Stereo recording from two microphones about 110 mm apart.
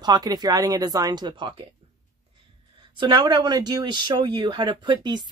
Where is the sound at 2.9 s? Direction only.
45° right (ahead or behind).